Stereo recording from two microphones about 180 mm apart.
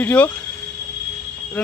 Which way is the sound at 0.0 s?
5° left (ahead or behind).